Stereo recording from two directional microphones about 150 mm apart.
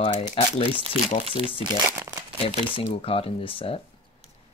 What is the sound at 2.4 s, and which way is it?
Speech, 40° left (ahead or behind).